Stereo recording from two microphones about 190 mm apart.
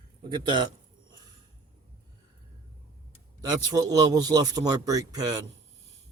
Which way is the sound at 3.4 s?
20° right (ahead or behind).